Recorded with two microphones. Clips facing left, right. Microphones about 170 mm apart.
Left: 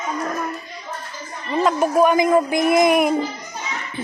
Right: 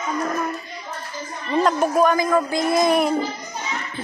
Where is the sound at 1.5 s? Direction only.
5° left (ahead or behind).